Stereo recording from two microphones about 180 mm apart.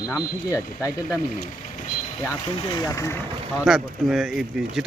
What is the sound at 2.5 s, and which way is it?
Speech, 20° left (ahead or behind).